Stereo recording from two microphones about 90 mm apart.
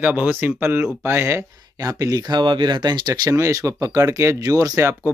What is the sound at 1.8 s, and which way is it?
Speech, 40° right (ahead or behind).